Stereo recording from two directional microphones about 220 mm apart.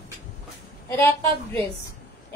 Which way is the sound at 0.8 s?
10° left (ahead or behind).